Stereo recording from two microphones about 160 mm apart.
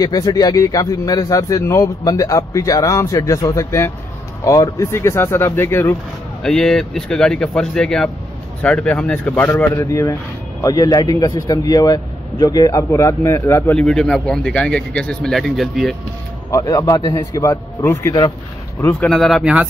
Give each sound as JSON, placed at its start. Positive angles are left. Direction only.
{"t": 0.0, "sound": "a man's voice", "side_deg": 25}
{"t": 6.4, "sound": "a man's voice", "side_deg": 5}
{"t": 13.7, "sound": "speech", "side_deg": 5}
{"t": 16.4, "sound": "a man's voice", "side_deg": 20}
{"t": 19.0, "sound": "speech", "side_deg": 0}